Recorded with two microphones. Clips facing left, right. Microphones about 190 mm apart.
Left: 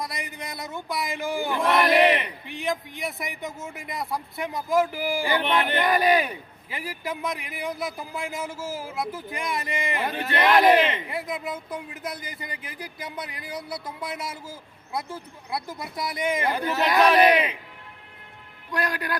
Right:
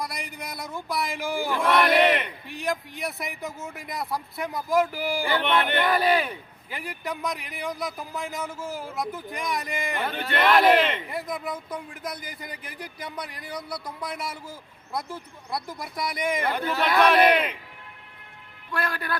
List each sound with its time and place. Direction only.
0.1 s speech: centre (ahead or behind)
5.9 s speech: 15° left (ahead or behind)
6.7 s speech: centre (ahead or behind)
10.1 s speech: 15° left (ahead or behind)
18.7 s speech: 15° left (ahead or behind)